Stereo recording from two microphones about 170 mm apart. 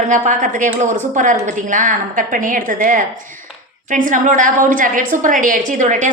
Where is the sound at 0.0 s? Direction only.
50° right (ahead or behind).